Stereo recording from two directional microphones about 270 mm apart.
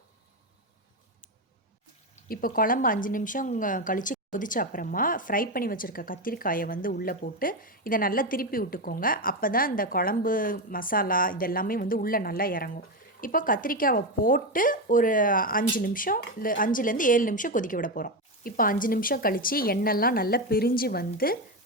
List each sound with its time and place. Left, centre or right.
2.3 s speech: left